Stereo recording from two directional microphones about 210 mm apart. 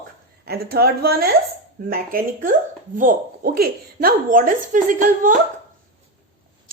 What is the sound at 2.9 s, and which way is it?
Speech, 40° right (ahead or behind).